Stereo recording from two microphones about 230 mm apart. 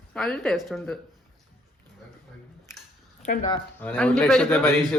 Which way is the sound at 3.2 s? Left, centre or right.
Left.